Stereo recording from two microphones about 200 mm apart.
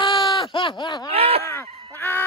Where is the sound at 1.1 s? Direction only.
30° right (ahead or behind).